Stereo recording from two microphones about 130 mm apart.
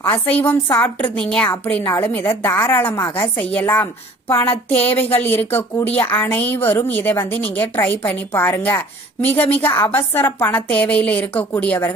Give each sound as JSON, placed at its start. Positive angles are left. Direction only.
{"t": 0.0, "sound": "speech", "side_deg": 15}
{"t": 4.5, "sound": "a sound", "side_deg": 50}
{"t": 5.2, "sound": "speech", "side_deg": 15}